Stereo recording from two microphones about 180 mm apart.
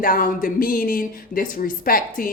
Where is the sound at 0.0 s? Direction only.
50° left (ahead or behind).